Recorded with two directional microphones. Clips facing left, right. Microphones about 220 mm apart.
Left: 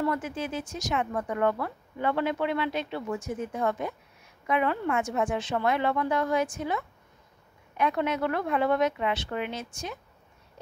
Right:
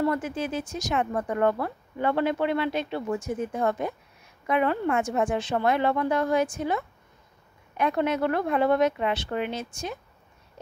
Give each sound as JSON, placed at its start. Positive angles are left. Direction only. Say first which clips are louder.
{"t": 0.0, "sound": "speech", "louder": "right 3 dB", "side_deg": -35}